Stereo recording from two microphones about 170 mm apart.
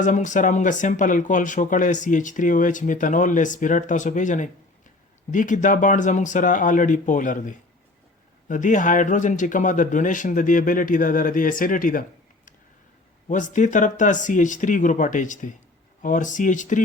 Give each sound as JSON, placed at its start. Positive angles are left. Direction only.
{"t": 0.0, "sound": "speech", "side_deg": 50}
{"t": 13.2, "sound": "speech", "side_deg": 45}